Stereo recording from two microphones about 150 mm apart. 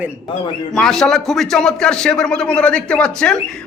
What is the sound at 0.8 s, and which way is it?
A man's voice, 5° left (ahead or behind).